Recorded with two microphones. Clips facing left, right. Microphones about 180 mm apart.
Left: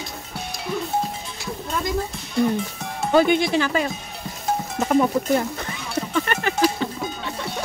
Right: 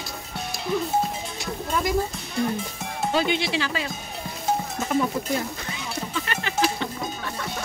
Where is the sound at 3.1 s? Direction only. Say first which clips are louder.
Left 8 dB; 50° left (ahead or behind).